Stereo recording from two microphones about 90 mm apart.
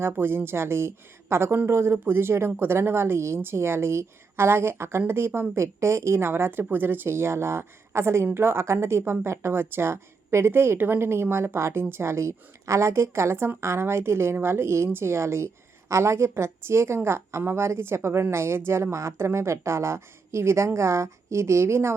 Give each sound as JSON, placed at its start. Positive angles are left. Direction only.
{"t": 0.0, "sound": "a woman's voice", "side_deg": -25}